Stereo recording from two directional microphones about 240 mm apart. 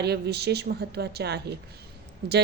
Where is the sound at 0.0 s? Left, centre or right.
Right.